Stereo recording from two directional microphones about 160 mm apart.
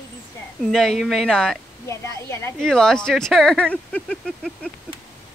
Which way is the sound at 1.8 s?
20° left (ahead or behind).